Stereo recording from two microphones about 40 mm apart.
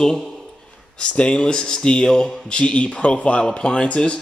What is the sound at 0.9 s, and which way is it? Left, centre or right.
A man's voice, left.